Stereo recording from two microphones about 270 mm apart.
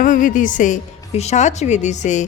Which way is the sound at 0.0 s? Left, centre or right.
Left.